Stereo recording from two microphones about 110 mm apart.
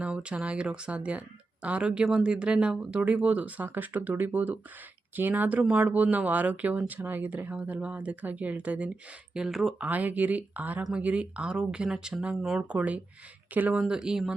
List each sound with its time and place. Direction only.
0.0 s speech: 10° right (ahead or behind)
9.8 s speech: 15° right (ahead or behind)